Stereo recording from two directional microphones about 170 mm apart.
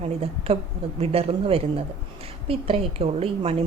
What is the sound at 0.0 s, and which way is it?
A woman's voice, 35° right (ahead or behind).